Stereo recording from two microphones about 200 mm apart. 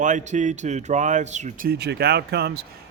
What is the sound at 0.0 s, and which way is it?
Speech, 40° right (ahead or behind).